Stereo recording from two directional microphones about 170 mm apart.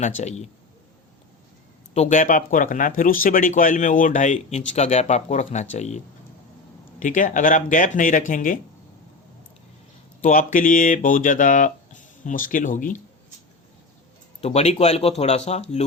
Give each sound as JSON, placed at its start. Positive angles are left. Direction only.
{"t": 0.0, "sound": "speech", "side_deg": 45}
{"t": 1.9, "sound": "speech", "side_deg": 45}
{"t": 7.0, "sound": "speech", "side_deg": 50}
{"t": 10.2, "sound": "speech", "side_deg": 50}
{"t": 14.4, "sound": "speech", "side_deg": 40}